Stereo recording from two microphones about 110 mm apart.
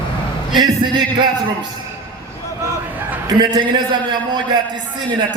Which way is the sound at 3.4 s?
45° right (ahead or behind).